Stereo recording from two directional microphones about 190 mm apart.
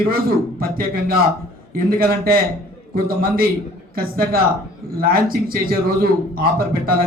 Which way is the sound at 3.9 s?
50° right (ahead or behind).